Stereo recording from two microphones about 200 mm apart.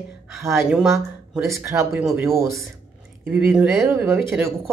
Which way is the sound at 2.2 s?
15° right (ahead or behind).